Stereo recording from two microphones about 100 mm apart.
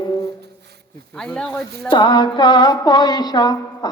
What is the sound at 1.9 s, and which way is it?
A woman's voice, 50° left (ahead or behind).